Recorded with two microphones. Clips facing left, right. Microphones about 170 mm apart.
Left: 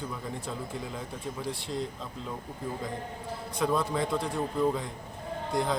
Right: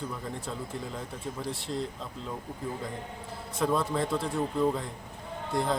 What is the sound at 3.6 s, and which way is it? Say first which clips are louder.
Speech: even; centre (ahead or behind).